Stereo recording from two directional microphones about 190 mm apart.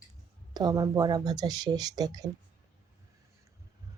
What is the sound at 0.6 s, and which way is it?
Speech, 20° right (ahead or behind).